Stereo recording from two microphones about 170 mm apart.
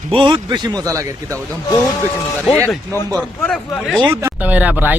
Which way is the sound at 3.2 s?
5° left (ahead or behind).